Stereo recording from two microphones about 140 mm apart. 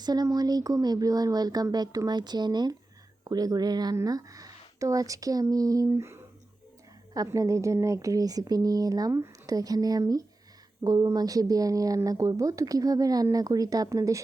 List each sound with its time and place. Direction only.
0.0 s speech: 30° right (ahead or behind)